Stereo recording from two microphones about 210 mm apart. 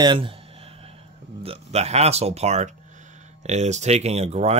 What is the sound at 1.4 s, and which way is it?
Speech, 30° right (ahead or behind).